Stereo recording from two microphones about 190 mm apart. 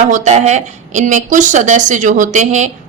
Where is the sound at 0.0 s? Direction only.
40° right (ahead or behind).